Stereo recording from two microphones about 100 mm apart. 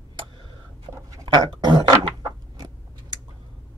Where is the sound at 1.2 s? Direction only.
50° right (ahead or behind).